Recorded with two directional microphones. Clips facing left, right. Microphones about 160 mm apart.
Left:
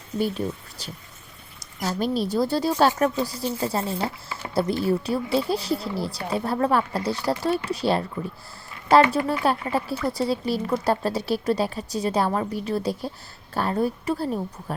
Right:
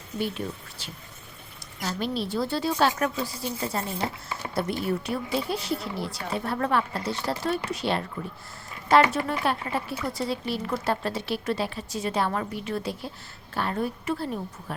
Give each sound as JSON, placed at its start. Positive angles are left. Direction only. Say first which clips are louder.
{"t": 0.2, "sound": "speech", "louder": "left 5 dB", "side_deg": 40}